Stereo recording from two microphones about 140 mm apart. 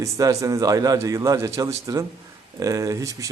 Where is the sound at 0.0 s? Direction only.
25° right (ahead or behind).